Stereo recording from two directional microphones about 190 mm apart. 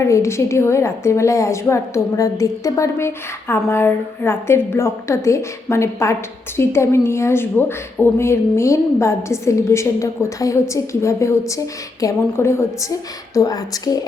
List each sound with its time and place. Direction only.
0.0 s a woman's voice: 15° left (ahead or behind)